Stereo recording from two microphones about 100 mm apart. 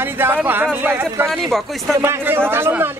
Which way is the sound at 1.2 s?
Centre (ahead or behind).